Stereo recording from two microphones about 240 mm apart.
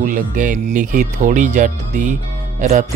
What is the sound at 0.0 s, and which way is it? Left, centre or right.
Speech, right.